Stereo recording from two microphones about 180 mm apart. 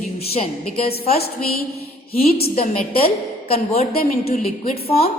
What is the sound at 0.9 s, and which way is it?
Speech, 35° left (ahead or behind).